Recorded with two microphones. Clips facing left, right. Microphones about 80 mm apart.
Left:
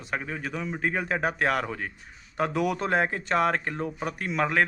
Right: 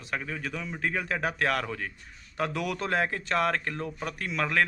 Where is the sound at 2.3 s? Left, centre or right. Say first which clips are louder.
Left 4 dB; centre.